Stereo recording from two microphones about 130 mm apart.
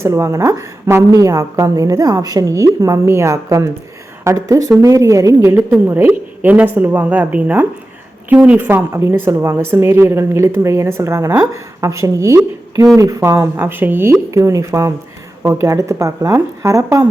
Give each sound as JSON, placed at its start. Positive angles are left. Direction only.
{"t": 0.0, "sound": "a woman's voice", "side_deg": -20}